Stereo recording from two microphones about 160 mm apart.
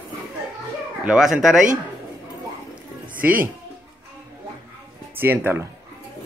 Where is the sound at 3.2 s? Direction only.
10° right (ahead or behind).